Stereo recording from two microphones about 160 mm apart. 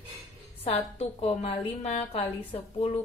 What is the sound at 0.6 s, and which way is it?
A woman's voice, 40° left (ahead or behind).